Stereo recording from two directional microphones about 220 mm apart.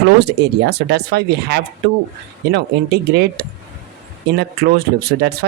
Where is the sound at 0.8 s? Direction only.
50° right (ahead or behind).